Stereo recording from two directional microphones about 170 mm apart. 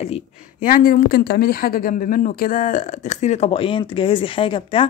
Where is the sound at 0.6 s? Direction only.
55° left (ahead or behind); by 4.9 s 30° left (ahead or behind).